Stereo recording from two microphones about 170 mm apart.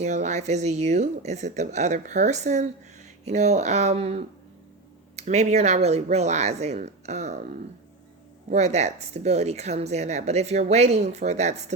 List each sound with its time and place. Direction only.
0.0 s speech: 45° right (ahead or behind)
8.4 s speech: 40° right (ahead or behind)